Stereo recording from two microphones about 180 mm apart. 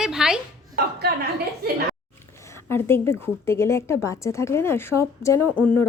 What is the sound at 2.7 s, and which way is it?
Speech, 15° left (ahead or behind).